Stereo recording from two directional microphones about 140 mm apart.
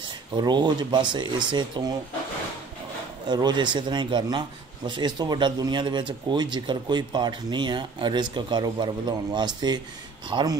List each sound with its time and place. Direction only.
0.4 s a man's voice: 30° right (ahead or behind)
3.3 s a man's voice: 30° right (ahead or behind)